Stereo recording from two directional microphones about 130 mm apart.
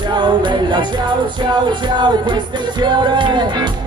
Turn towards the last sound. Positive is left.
turn(degrees=-35)  # may be behind; listen again after turning